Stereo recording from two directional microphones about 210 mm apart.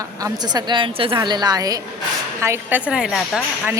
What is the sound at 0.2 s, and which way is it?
A woman's voice, 20° right (ahead or behind).